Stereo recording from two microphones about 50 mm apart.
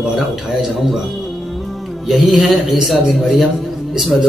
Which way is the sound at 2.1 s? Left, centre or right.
Centre.